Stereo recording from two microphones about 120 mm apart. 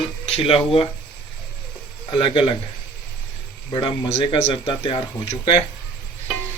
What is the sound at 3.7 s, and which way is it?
Speech, 40° left (ahead or behind).